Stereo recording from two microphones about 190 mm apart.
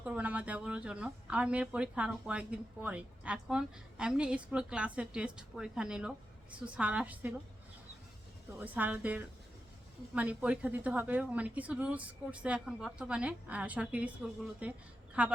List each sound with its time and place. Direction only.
0.0 s a woman's voice: 5° right (ahead or behind)
8.5 s a woman's voice: 10° right (ahead or behind)